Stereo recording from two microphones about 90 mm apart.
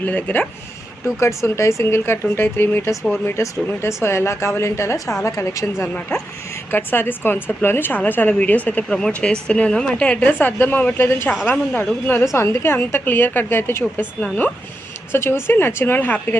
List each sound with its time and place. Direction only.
0.0 s speech: 20° left (ahead or behind)
1.0 s speech: 30° left (ahead or behind)
12.2 s speech: 35° left (ahead or behind)
15.1 s speech: 25° left (ahead or behind)